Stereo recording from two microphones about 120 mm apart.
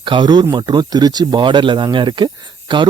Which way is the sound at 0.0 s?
40° right (ahead or behind).